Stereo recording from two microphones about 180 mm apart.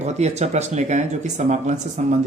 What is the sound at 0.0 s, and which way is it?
Speech, 40° right (ahead or behind).